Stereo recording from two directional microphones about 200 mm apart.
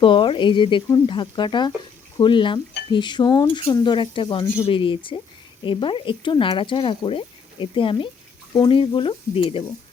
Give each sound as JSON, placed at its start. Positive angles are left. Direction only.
{"t": 0.0, "sound": "speech", "side_deg": 25}